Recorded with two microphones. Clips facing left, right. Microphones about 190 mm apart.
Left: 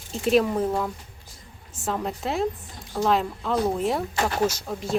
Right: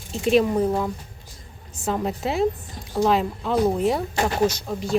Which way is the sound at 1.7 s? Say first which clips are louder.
Right 3 dB; centre (ahead or behind).